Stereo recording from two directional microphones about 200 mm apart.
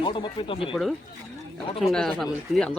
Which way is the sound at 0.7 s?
Centre (ahead or behind).